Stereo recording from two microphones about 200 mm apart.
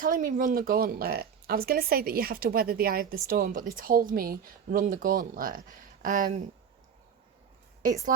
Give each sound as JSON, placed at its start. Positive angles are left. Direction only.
{"t": 0.0, "sound": "speech", "side_deg": -40}